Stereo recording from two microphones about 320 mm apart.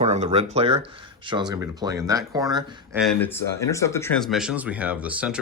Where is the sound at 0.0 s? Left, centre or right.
Centre.